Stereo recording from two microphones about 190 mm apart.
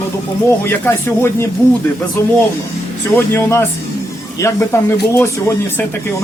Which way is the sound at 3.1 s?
10° left (ahead or behind).